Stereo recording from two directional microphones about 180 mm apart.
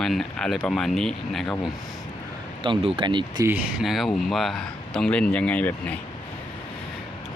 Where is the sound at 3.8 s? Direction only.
Centre (ahead or behind).